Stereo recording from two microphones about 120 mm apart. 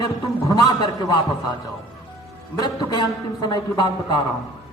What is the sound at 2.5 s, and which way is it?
A man's voice, 35° left (ahead or behind).